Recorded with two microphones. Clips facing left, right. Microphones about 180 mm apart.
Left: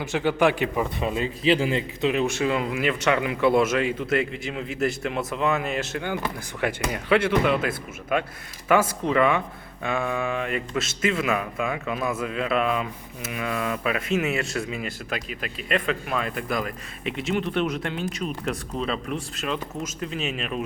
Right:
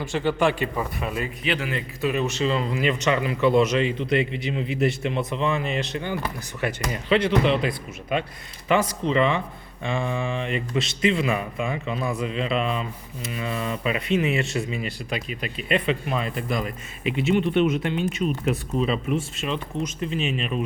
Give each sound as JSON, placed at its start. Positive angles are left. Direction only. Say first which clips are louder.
{"t": 0.0, "sound": "speech", "louder": "left 1 dB", "side_deg": 15}
{"t": 0.9, "sound": "speech", "louder": "left 2 dB", "side_deg": 25}
{"t": 8.7, "sound": "speech", "louder": "left 1 dB", "side_deg": 5}
{"t": 13.3, "sound": "a sound", "louder": "left 1 dB", "side_deg": 80}
{"t": 13.8, "sound": "speech", "louder": "right 3 dB", "side_deg": 0}